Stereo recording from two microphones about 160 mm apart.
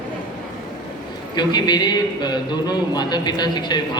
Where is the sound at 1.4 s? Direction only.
25° left (ahead or behind).